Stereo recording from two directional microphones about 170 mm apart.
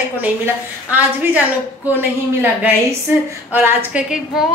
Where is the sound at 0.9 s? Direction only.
10° right (ahead or behind).